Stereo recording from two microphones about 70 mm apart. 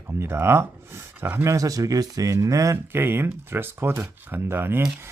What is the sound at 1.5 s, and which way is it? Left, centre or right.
Speech, right.